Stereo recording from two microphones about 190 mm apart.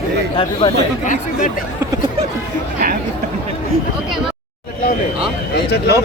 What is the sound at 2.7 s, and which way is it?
Speech, 50° right (ahead or behind).